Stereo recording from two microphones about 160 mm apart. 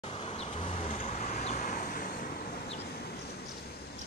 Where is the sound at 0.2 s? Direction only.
35° left (ahead or behind); by 2.3 s 60° left (ahead or behind).